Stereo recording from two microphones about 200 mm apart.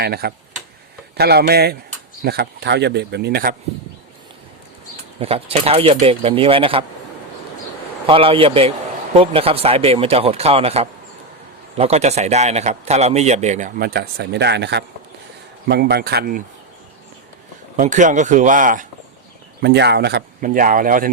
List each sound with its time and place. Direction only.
0.0 s speech: 50° right (ahead or behind)
5.2 s speech: 30° right (ahead or behind)
8.0 s speech: 25° right (ahead or behind); by 16.4 s 50° right (ahead or behind)
17.7 s speech: 40° right (ahead or behind)
19.6 s speech: 55° right (ahead or behind)
20.4 s speech: 45° right (ahead or behind)